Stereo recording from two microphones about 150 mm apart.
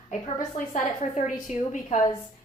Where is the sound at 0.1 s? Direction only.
55° left (ahead or behind).